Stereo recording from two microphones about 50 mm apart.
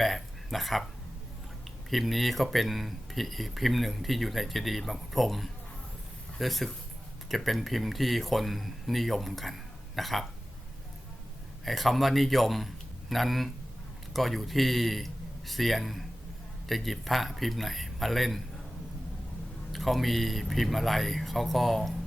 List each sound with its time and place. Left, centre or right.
0.0 s a sound: centre
1.9 s speech: centre
11.6 s a man's voice: centre
19.7 s speech: centre